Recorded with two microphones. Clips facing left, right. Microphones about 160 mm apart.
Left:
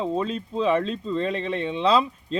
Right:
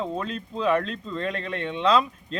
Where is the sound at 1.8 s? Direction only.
5° left (ahead or behind).